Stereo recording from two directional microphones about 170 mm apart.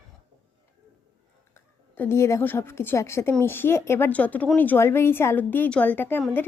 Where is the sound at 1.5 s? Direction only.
15° left (ahead or behind).